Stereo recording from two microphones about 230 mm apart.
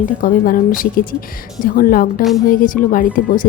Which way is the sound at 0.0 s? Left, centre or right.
Left.